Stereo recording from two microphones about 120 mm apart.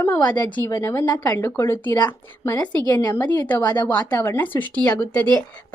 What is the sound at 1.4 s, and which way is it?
Speech, 15° left (ahead or behind).